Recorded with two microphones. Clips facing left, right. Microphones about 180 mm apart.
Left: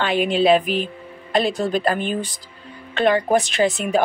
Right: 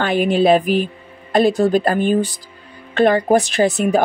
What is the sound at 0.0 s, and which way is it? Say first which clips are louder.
Speech: right 3 dB; 45° right (ahead or behind).